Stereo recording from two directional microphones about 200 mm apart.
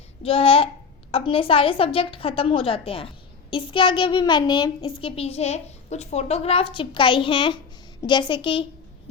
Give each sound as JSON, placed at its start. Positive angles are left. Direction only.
{"t": 0.2, "sound": "a child's voice", "side_deg": 30}